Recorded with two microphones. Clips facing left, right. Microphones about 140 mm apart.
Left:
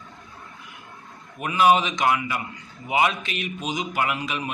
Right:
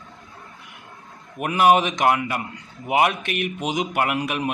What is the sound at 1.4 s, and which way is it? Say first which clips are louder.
A man's voice: right 2 dB; 55° right (ahead or behind).